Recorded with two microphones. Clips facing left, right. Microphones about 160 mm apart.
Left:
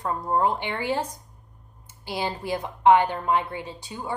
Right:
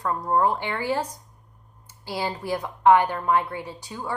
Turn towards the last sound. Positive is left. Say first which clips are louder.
# right 1 dB
turn(degrees=20)  # may be behind; listen again after turning